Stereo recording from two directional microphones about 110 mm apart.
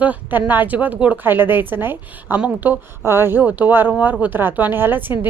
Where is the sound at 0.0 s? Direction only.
15° right (ahead or behind).